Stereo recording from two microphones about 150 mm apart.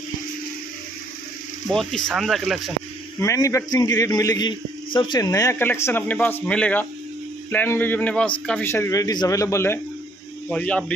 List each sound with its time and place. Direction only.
1.7 s speech: 5° left (ahead or behind)
3.2 s a man's voice: 20° left (ahead or behind)
10.5 s a man's voice: 5° left (ahead or behind)